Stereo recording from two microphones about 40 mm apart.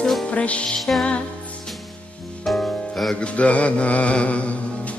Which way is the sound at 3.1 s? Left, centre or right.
Left.